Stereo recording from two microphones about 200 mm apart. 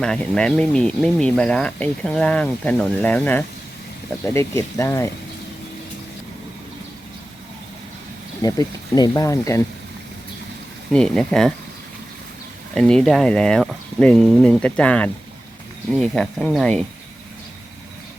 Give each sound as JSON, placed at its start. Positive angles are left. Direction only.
{"t": 0.0, "sound": "speech", "side_deg": 5}
{"t": 8.4, "sound": "speech", "side_deg": 20}
{"t": 10.9, "sound": "speech", "side_deg": 5}
{"t": 12.7, "sound": "speech", "side_deg": 5}